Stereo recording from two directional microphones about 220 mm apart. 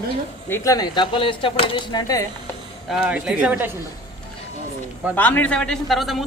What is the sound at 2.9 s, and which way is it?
Speech, 5° right (ahead or behind).